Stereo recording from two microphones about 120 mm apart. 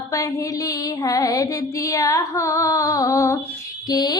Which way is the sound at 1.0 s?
30° left (ahead or behind).